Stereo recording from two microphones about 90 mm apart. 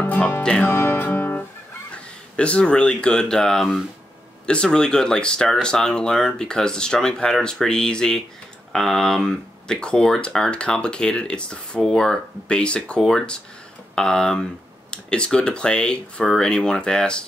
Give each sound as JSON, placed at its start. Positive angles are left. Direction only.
{"t": 0.0, "sound": "music", "side_deg": 20}
{"t": 0.4, "sound": "speech", "side_deg": 10}
{"t": 0.7, "sound": "music", "side_deg": 25}
{"t": 1.9, "sound": "speech", "side_deg": 10}